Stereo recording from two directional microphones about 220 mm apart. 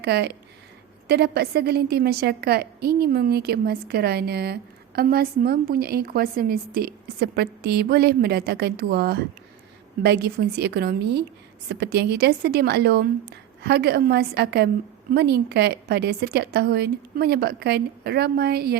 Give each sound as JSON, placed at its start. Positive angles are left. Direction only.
{"t": 0.0, "sound": "a woman's voice", "side_deg": -50}